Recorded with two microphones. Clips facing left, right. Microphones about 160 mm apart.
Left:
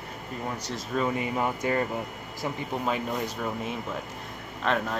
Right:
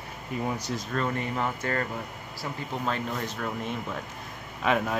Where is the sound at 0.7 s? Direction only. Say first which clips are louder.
Left 1 dB; 5° left (ahead or behind).